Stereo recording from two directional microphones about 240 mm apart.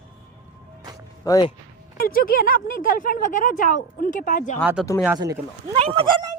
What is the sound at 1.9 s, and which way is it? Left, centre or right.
Speech, left.